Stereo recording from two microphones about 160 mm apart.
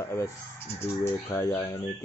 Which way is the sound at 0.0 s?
15° left (ahead or behind).